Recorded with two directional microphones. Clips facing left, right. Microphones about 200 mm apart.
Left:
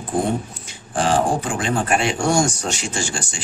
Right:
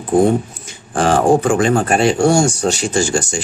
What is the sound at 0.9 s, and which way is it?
Speech, 50° right (ahead or behind).